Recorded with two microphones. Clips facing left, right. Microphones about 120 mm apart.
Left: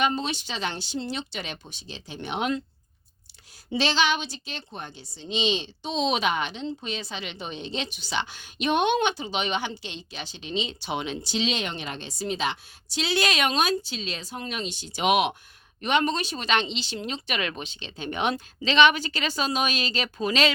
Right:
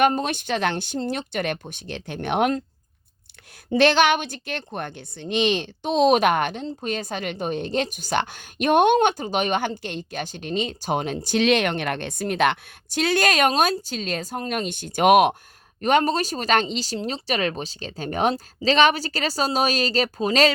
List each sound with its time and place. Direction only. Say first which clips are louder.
0.0 s a woman's voice: right 6 dB; 50° right (ahead or behind)
3.7 s a woman's voice: right 7 dB; 55° right (ahead or behind)